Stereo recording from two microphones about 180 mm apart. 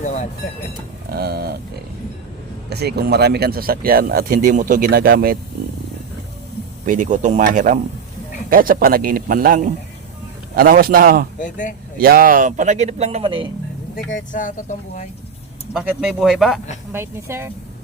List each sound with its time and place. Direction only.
0.0 s vehicle: 40° left (ahead or behind)
1.1 s speech: 60° right (ahead or behind)
2.6 s speech: 65° right (ahead or behind)
6.8 s a man's voice: 45° right (ahead or behind)
11.3 s speech: 45° left (ahead or behind)
11.9 s speech: 55° right (ahead or behind); by 13.5 s 30° right (ahead or behind)
14.3 s speech: 45° left (ahead or behind)
15.7 s speech: 5° right (ahead or behind)
16.9 s speech: 15° right (ahead or behind)